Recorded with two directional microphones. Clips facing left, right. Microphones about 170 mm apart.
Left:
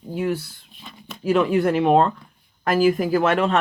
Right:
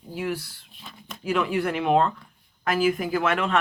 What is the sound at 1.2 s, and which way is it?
Speech, 40° left (ahead or behind).